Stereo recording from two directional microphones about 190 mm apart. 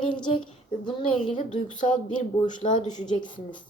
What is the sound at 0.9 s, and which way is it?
Speech, 25° left (ahead or behind).